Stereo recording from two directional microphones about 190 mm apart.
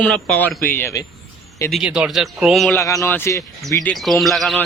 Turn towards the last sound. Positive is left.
turn(degrees=0)  # may be behind; listen again after turning